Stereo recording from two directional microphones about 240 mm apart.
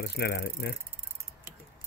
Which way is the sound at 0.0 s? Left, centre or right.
Left.